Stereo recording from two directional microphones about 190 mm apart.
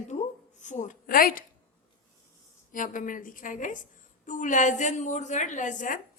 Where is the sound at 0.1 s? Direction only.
40° left (ahead or behind).